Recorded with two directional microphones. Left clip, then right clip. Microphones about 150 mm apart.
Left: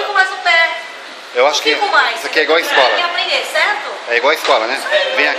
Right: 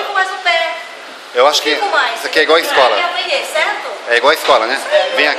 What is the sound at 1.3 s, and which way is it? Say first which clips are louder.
A man's voice: right 1 dB; 15° right (ahead or behind).